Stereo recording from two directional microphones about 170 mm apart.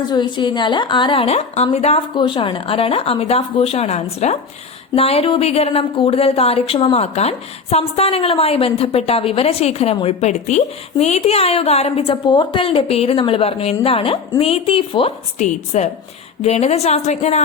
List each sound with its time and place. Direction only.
0.1 s speech: 25° left (ahead or behind)